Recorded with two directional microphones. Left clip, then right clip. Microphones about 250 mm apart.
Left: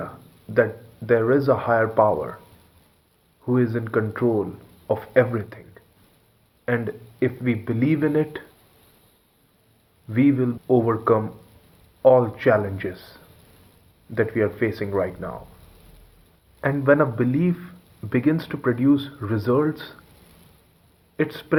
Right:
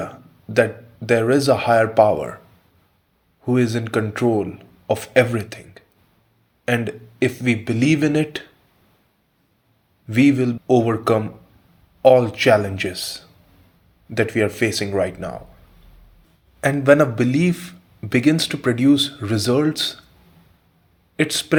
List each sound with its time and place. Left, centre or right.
0.5 s a man's voice: right
3.4 s a man's voice: right
10.1 s a man's voice: right
16.6 s a man's voice: right
21.2 s a man's voice: right